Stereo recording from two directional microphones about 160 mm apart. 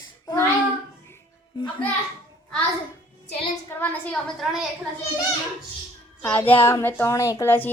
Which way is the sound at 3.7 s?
10° left (ahead or behind).